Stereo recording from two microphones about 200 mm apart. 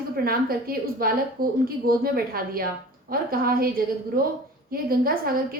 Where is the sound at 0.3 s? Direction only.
45° right (ahead or behind).